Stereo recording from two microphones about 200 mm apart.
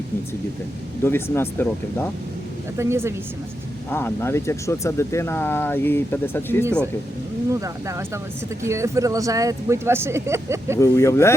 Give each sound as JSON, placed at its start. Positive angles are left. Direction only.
{"t": 1.0, "sound": "speech", "side_deg": 10}
{"t": 2.7, "sound": "speech", "side_deg": -15}
{"t": 3.8, "sound": "speech", "side_deg": 10}
{"t": 7.5, "sound": "speech", "side_deg": -15}
{"t": 10.8, "sound": "speech", "side_deg": 15}